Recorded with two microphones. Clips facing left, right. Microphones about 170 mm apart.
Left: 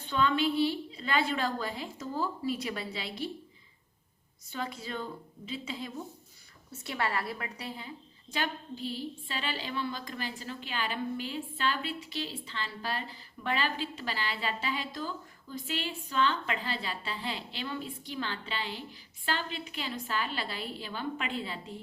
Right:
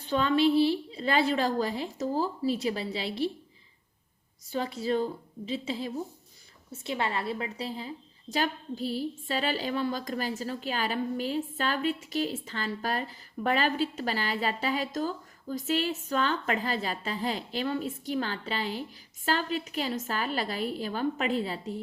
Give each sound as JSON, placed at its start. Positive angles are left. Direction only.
{"t": 0.0, "sound": "a woman's voice", "side_deg": -40}
{"t": 4.4, "sound": "a woman's voice", "side_deg": -35}
{"t": 6.7, "sound": "a woman's voice", "side_deg": -25}